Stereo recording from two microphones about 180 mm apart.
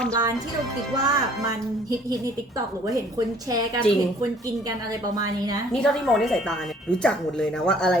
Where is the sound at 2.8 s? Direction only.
20° right (ahead or behind).